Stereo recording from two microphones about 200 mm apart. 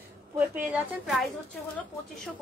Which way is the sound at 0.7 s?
Centre (ahead or behind).